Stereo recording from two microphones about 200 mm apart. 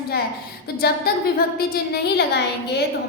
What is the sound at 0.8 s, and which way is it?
A woman's voice, 50° left (ahead or behind).